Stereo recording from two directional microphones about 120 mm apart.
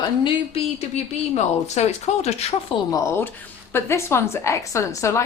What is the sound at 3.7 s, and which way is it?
Speech, 20° left (ahead or behind).